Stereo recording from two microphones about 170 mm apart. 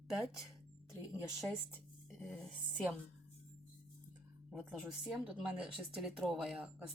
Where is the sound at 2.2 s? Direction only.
5° left (ahead or behind).